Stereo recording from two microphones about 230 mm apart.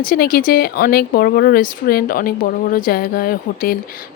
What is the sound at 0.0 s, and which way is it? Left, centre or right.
Speech, left.